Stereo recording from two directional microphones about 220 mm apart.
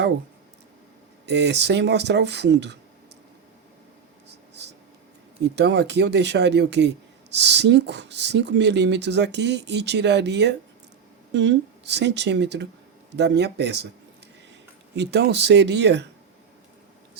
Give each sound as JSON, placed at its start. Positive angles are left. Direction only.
{"t": 1.3, "sound": "speech", "side_deg": -50}
{"t": 5.4, "sound": "speech", "side_deg": -50}
{"t": 14.9, "sound": "speech", "side_deg": -50}